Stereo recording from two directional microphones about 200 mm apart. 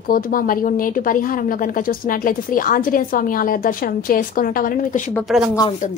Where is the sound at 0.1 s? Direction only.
45° left (ahead or behind).